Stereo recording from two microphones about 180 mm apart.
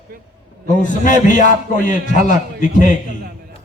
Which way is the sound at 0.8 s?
45° left (ahead or behind).